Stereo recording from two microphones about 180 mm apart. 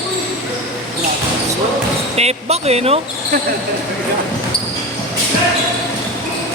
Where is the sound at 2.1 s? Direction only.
35° right (ahead or behind).